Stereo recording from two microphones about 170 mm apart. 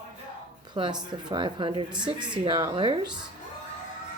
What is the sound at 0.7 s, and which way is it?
Speech, 25° right (ahead or behind).